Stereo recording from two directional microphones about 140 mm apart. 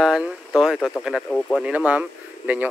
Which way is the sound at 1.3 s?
10° left (ahead or behind).